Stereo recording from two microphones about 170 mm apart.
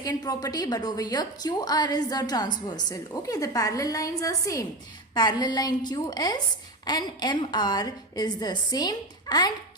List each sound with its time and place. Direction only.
0.0 s a woman's voice: 20° left (ahead or behind)